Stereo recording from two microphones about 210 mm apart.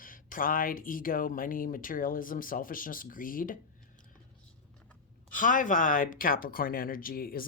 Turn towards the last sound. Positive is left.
turn(degrees=45)  # may be behind; listen again after turning